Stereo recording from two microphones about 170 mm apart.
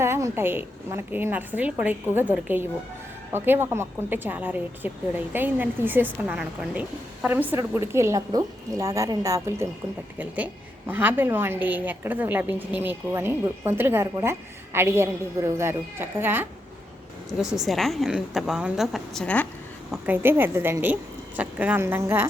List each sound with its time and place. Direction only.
0.0 s a woman's voice: 15° right (ahead or behind); by 19.5 s 5° left (ahead or behind)
19.9 s a woman's voice: 10° right (ahead or behind)